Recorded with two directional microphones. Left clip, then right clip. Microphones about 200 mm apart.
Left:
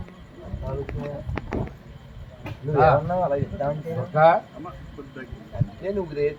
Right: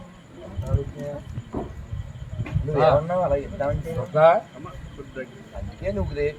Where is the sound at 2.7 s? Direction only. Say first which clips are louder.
Even; 5° right (ahead or behind).